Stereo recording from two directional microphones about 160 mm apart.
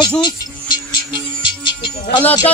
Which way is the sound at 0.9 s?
30° left (ahead or behind).